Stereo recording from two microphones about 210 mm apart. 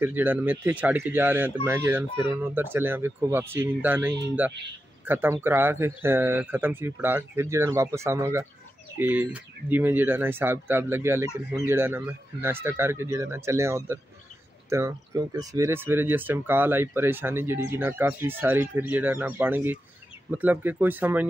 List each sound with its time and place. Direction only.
0.0 s speech: 10° right (ahead or behind)